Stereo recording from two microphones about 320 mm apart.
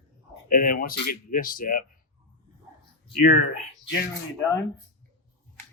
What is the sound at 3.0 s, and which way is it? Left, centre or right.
Speech, left.